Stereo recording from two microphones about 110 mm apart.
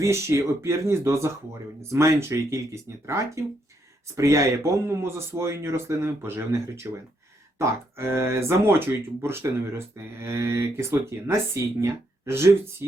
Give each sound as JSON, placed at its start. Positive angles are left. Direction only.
{"t": 0.0, "sound": "speech", "side_deg": -25}